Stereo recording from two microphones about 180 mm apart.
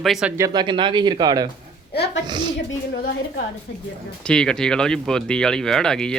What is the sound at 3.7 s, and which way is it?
Speech, 75° left (ahead or behind).